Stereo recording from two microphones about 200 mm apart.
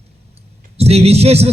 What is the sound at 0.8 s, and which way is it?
Speech, 30° right (ahead or behind).